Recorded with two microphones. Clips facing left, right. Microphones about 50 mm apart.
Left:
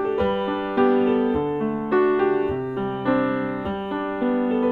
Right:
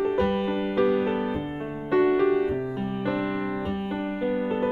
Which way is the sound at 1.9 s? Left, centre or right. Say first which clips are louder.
Left 1 dB; centre.